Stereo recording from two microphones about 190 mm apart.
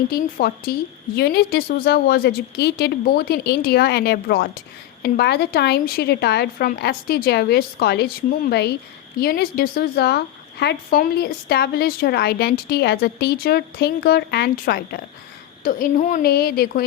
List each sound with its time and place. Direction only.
0.1 s a woman's voice: 50° left (ahead or behind)